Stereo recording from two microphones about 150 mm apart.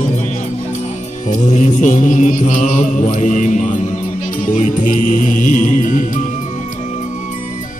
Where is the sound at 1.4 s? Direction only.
55° left (ahead or behind).